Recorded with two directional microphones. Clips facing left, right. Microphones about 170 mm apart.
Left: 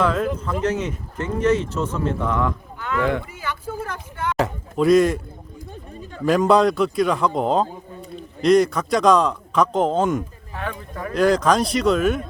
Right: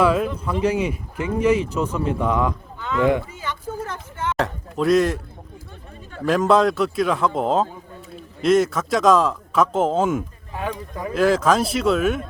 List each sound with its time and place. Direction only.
0.0 s speech: 10° right (ahead or behind)
3.8 s a sound: 10° left (ahead or behind)
4.4 s a man's voice: centre (ahead or behind)
6.2 s a man's voice: centre (ahead or behind)
10.5 s speech: 15° right (ahead or behind)
11.1 s a man's voice: 5° right (ahead or behind)